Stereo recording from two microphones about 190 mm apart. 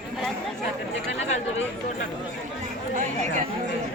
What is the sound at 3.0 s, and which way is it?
Speech, 40° right (ahead or behind).